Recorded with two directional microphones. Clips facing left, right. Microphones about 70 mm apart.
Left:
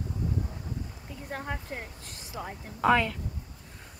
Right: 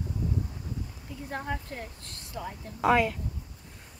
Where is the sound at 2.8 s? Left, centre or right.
Centre.